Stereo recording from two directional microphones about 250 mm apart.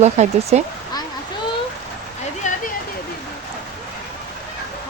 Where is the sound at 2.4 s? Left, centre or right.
Left.